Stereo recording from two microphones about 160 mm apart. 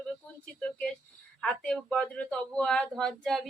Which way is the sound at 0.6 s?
5° left (ahead or behind).